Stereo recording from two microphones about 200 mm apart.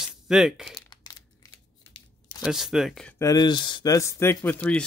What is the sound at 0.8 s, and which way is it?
Crumpling, 20° left (ahead or behind).